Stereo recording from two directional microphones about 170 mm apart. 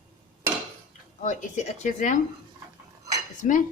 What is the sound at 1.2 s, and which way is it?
Speech, 45° left (ahead or behind).